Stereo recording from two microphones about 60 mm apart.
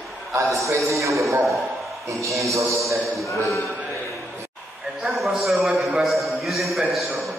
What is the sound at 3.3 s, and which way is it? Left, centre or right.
Speech, left.